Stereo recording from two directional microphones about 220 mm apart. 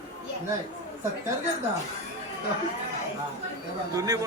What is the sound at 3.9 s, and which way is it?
Speech, 15° right (ahead or behind).